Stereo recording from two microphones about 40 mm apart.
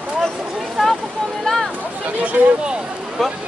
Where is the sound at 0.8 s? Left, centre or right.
Centre.